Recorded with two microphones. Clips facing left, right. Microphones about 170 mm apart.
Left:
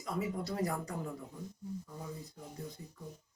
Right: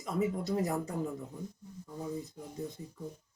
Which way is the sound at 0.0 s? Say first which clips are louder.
Right 4 dB; 20° right (ahead or behind).